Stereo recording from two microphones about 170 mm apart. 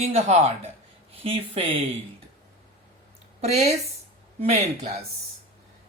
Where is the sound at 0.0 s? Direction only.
40° right (ahead or behind).